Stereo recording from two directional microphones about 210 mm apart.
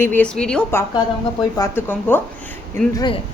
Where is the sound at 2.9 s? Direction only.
20° left (ahead or behind).